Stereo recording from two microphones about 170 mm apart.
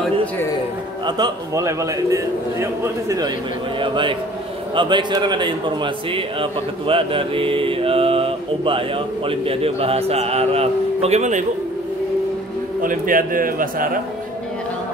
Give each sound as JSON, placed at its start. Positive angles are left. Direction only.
{"t": 1.0, "sound": "a man's voice", "side_deg": -25}
{"t": 12.8, "sound": "a man's voice", "side_deg": -55}